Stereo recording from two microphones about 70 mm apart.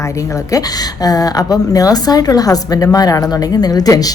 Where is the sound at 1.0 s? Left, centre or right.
Left.